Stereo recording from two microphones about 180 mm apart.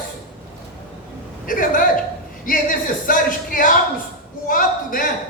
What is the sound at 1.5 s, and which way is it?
Speech, 50° left (ahead or behind).